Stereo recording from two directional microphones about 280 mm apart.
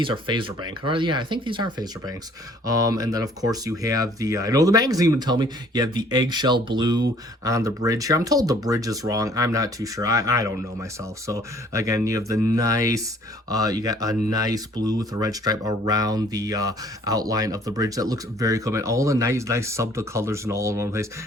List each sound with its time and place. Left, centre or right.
0.0 s speech: centre